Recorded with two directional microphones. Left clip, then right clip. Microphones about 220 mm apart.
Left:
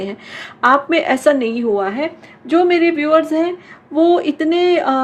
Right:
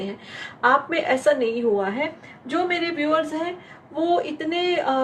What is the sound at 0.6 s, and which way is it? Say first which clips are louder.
A woman's voice: left 6 dB; 50° left (ahead or behind).